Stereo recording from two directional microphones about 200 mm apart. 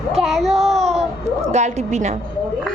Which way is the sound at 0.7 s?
30° right (ahead or behind).